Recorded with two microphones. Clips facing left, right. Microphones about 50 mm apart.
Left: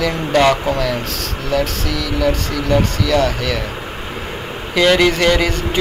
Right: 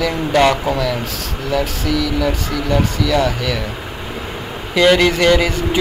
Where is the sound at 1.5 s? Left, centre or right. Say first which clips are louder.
Right 1 dB; centre.